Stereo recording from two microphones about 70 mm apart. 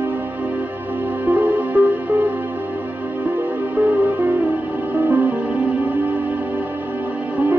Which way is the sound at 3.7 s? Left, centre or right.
Right.